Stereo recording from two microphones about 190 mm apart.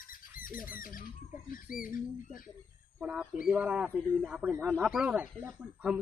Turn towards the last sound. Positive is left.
turn(degrees=-5)  # may be behind; listen again after turning